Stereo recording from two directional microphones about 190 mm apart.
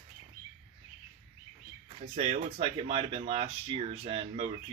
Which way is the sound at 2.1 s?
35° right (ahead or behind).